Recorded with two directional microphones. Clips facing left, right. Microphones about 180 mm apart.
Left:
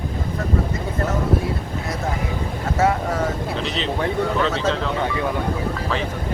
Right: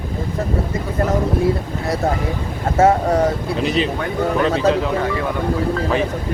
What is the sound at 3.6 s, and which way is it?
Speech, 10° right (ahead or behind).